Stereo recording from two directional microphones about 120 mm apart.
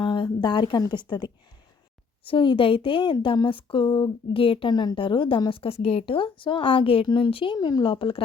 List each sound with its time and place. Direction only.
0.0 s a woman's voice: 40° left (ahead or behind)